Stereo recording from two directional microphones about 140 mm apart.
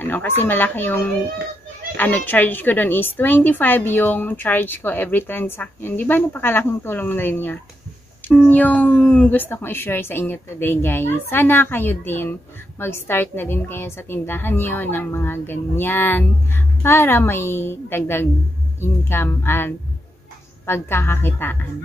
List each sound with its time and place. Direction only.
0.0 s speech: 15° left (ahead or behind)